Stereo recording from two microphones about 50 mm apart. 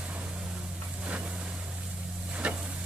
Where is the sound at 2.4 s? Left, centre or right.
Right.